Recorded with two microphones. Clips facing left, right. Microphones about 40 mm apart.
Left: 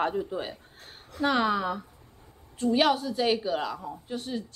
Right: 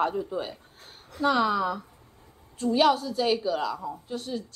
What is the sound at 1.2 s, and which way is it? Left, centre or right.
A woman's voice, left.